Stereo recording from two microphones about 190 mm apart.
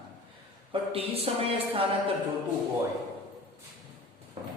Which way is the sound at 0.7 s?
30° right (ahead or behind).